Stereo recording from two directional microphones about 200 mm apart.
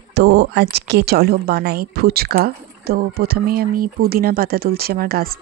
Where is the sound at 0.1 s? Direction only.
55° right (ahead or behind).